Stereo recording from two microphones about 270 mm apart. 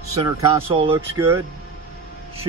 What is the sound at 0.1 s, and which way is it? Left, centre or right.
Speech, centre.